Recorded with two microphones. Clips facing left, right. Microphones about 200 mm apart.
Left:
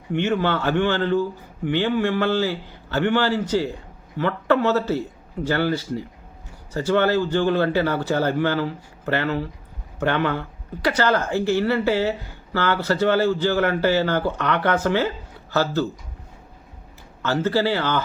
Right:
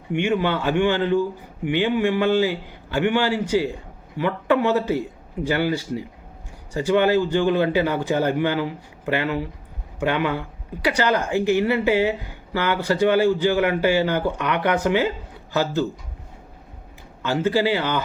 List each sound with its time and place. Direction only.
0.1 s a man's voice: 15° right (ahead or behind)
17.2 s a man's voice: 15° right (ahead or behind)